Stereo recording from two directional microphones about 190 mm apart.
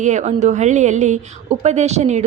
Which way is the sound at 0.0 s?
40° right (ahead or behind).